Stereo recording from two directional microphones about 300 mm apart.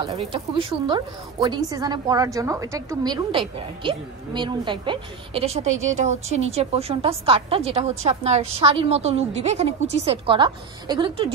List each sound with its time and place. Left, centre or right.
0.0 s a woman's voice: centre